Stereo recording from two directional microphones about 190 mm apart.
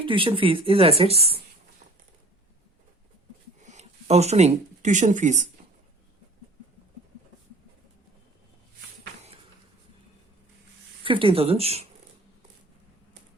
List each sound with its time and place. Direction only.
0.0 s speech: 25° right (ahead or behind)
3.6 s speech: 40° right (ahead or behind)
11.0 s speech: 30° right (ahead or behind)